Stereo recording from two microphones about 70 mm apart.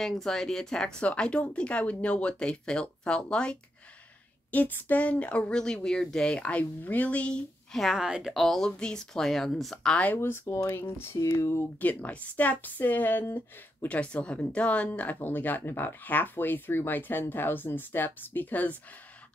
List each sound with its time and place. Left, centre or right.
0.0 s speech: centre
4.5 s speech: left
7.7 s speech: centre
8.0 s speech: centre
8.3 s speech: centre
10.1 s speech: left
11.8 s speech: left
13.8 s speech: centre